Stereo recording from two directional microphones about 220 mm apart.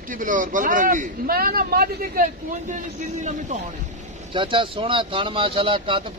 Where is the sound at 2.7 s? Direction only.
35° right (ahead or behind).